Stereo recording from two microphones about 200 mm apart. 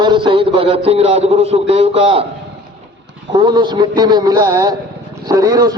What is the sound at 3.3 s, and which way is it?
A man's voice, 20° right (ahead or behind).